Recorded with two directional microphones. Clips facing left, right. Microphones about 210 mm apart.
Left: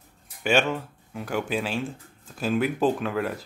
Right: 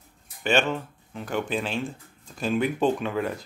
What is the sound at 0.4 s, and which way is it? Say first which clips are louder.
Speech: left 1 dB; 10° left (ahead or behind).